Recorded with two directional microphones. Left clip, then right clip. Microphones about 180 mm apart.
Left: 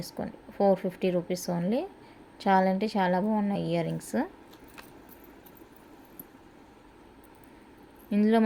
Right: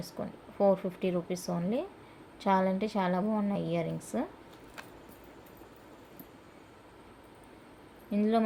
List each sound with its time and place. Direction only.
0.0 s a woman's voice: 45° left (ahead or behind)
8.1 s a woman's voice: 55° left (ahead or behind)